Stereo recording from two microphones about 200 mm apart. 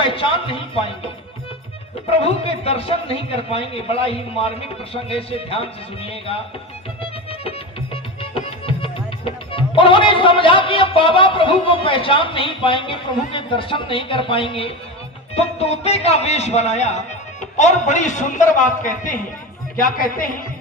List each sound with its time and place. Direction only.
0.0 s a man's voice: 25° left (ahead or behind)
2.0 s a man's voice: 30° left (ahead or behind)
7.0 s music: 30° left (ahead or behind)
9.5 s a man's voice: 25° left (ahead or behind); by 20.3 s 45° left (ahead or behind)